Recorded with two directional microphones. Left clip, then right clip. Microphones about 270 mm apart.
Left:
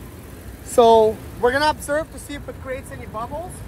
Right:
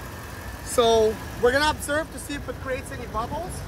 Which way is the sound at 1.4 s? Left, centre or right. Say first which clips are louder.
Left 2 dB; centre.